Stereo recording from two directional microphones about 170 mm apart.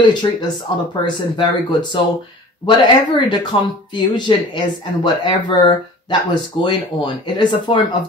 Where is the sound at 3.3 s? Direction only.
25° left (ahead or behind).